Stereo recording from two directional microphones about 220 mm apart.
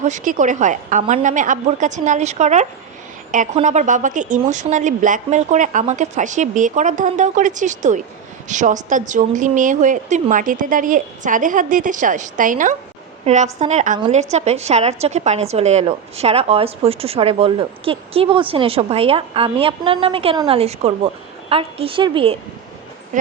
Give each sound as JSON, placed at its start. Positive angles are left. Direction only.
{"t": 0.0, "sound": "a woman's voice", "side_deg": -35}